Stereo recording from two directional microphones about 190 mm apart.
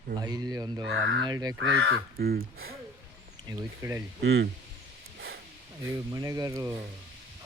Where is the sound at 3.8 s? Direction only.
15° right (ahead or behind).